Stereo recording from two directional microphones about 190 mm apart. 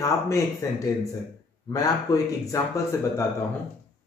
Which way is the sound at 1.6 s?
20° left (ahead or behind).